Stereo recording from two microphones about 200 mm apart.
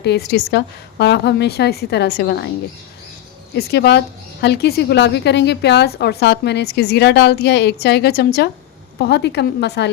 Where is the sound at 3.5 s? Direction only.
55° left (ahead or behind).